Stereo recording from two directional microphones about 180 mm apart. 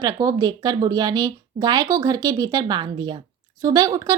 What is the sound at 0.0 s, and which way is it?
Speech, 20° right (ahead or behind).